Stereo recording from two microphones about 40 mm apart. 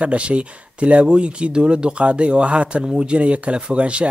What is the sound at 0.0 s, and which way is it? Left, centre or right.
Speech, right.